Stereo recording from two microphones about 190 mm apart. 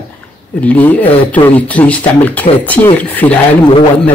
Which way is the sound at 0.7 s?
10° left (ahead or behind).